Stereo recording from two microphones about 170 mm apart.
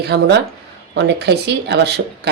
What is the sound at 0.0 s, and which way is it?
Speech, 75° right (ahead or behind).